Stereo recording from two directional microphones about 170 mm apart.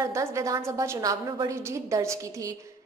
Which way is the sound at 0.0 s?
20° right (ahead or behind).